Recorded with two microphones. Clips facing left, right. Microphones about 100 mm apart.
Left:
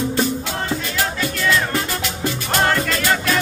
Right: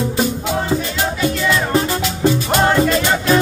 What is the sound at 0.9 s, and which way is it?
Music, 20° right (ahead or behind).